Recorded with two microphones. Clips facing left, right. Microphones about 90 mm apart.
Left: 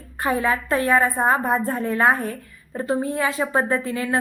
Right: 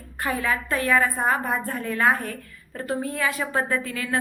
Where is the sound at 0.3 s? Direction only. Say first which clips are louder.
Left 4 dB; 25° left (ahead or behind).